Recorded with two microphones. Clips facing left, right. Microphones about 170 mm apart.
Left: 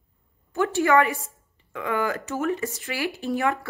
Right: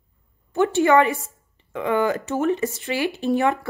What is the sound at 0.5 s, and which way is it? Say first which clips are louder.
Speech: right 3 dB; 25° right (ahead or behind).